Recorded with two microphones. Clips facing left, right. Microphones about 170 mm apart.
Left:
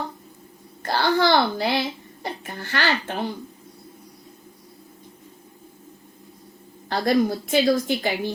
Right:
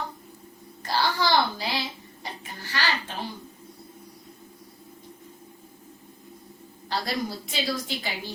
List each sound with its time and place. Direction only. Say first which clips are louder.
0.8 s a sound: left 5 dB; 55° left (ahead or behind)
2.2 s a child's voice: left 7 dB; 55° left (ahead or behind)
6.8 s a woman's voice: left 9 dB; 50° left (ahead or behind)